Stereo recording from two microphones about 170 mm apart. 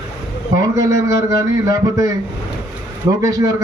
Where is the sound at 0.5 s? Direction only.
20° right (ahead or behind).